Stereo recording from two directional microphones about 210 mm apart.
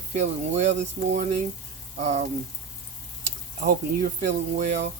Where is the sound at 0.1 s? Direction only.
35° right (ahead or behind).